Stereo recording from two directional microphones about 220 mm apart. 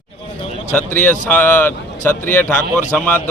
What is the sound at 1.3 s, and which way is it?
A man's voice, 5° left (ahead or behind).